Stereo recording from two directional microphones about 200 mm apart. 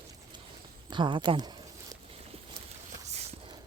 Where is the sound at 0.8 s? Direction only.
25° right (ahead or behind).